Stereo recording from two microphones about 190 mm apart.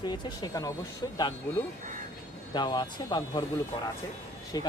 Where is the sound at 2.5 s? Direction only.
25° left (ahead or behind).